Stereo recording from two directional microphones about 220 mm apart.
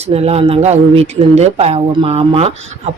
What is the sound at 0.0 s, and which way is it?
Speech, 25° right (ahead or behind).